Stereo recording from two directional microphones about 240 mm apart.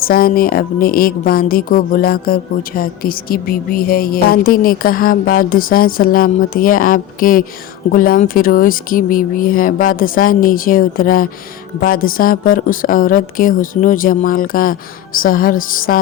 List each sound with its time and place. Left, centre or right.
0.0 s a woman's voice: left